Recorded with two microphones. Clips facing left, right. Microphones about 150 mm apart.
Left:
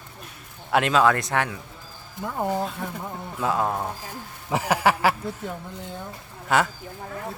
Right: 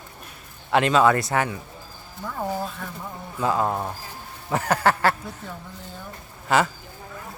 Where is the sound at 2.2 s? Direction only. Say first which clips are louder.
Left 2 dB; 20° left (ahead or behind).